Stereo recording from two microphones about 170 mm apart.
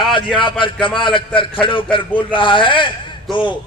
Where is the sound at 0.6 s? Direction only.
30° left (ahead or behind).